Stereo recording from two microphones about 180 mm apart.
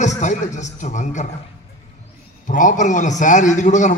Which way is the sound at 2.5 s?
45° left (ahead or behind).